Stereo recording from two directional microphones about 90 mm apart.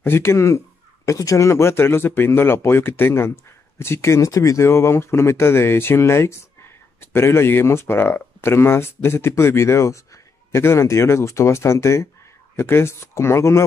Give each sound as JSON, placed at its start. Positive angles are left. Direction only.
{"t": 0.0, "sound": "speech", "side_deg": 25}